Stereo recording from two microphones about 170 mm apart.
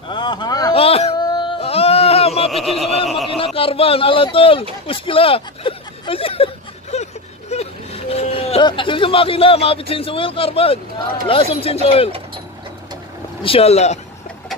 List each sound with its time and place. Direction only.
0.1 s a sound: 25° left (ahead or behind)
0.7 s a sound: 35° left (ahead or behind)
3.3 s a man's voice: 30° left (ahead or behind)
4.8 s hubbub: 30° left (ahead or behind)
11.2 s a man's voice: 35° left (ahead or behind)
13.4 s a man's voice: 35° left (ahead or behind)